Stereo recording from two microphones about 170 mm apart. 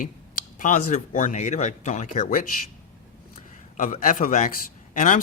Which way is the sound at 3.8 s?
50° left (ahead or behind).